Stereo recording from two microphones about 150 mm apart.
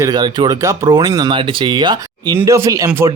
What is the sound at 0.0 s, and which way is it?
Speech, 30° right (ahead or behind).